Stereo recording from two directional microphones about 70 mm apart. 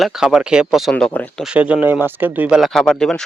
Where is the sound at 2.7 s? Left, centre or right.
Centre.